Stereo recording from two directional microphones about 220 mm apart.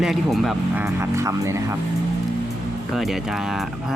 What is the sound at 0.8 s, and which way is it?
Speech, 10° right (ahead or behind).